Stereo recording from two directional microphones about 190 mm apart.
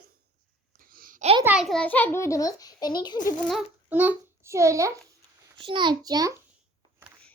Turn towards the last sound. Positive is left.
turn(degrees=-20)  # may be behind; listen again after turning